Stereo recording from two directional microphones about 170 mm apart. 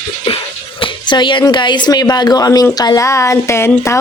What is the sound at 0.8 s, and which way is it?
Speech, 30° left (ahead or behind).